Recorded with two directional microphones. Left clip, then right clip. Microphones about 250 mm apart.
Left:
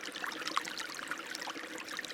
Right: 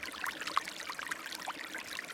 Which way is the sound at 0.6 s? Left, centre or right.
Centre.